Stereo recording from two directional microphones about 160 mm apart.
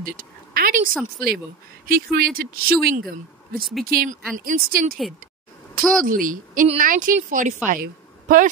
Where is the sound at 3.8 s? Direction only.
65° right (ahead or behind).